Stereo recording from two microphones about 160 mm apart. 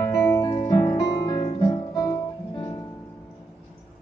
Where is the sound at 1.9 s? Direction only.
20° left (ahead or behind).